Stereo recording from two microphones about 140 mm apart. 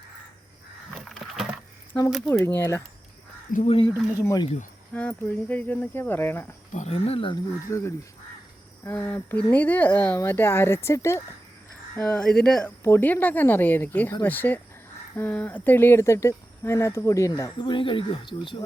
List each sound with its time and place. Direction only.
0.9 s a sound: centre (ahead or behind)
2.4 s speech: 15° left (ahead or behind)
3.5 s speech: 55° left (ahead or behind)
4.2 s speech: 20° left (ahead or behind)
4.9 s speech: 10° left (ahead or behind)
6.7 s speech: 50° left (ahead or behind)
7.7 s speech: 20° left (ahead or behind)
12.0 s speech: 5° left (ahead or behind); by 18.6 s 35° left (ahead or behind)